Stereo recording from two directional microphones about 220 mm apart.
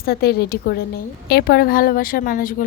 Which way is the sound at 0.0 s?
45° left (ahead or behind).